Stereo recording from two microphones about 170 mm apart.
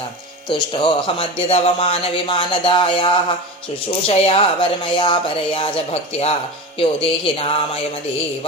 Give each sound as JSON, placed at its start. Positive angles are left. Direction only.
{"t": 0.4, "sound": "speech", "side_deg": 25}